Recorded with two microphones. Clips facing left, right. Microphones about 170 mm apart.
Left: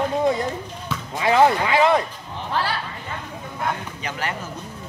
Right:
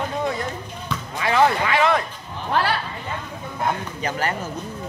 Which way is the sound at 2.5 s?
60° right (ahead or behind).